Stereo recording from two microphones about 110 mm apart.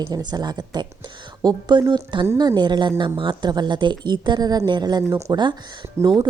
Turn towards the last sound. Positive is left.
turn(degrees=-25)  # may be behind; listen again after turning